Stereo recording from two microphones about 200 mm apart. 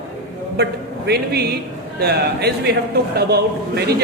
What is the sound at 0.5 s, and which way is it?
A man's voice, 55° right (ahead or behind).